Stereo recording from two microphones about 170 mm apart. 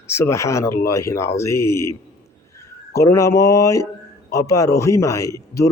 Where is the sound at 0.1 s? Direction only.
15° left (ahead or behind).